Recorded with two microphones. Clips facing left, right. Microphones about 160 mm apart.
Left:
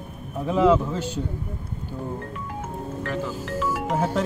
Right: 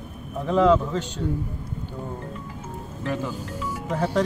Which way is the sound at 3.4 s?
90° left.